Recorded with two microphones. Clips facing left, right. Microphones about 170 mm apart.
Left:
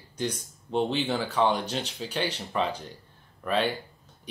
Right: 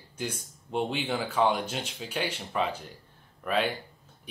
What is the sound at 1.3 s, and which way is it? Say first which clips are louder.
Speech: even; 10° right (ahead or behind).